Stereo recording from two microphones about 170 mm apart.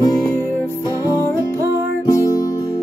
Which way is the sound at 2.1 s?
20° left (ahead or behind).